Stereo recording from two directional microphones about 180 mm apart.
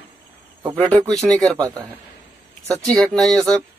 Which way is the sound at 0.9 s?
5° left (ahead or behind).